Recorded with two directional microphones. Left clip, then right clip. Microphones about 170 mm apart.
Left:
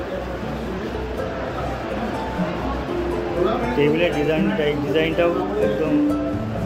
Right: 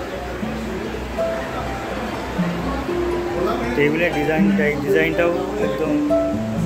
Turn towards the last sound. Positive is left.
turn(degrees=-5)  # may be behind; listen again after turning